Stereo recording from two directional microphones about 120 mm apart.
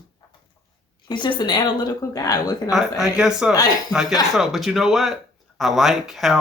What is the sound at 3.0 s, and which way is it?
Speech, 5° right (ahead or behind).